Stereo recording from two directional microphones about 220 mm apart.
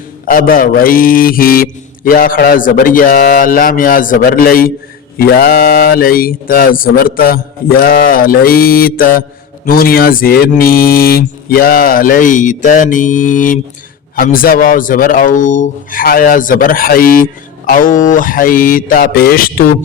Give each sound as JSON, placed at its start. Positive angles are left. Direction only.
{"t": 0.3, "sound": "a man's voice", "side_deg": 40}